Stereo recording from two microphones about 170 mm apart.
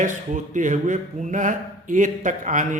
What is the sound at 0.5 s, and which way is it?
A man's voice, 50° right (ahead or behind).